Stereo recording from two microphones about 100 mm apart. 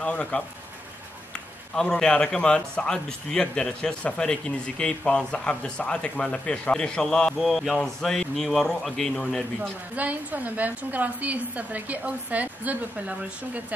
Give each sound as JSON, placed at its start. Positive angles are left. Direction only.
{"t": 0.0, "sound": "a man's voice", "side_deg": 10}
{"t": 1.8, "sound": "a man's voice", "side_deg": 5}
{"t": 9.6, "sound": "a woman's voice", "side_deg": -15}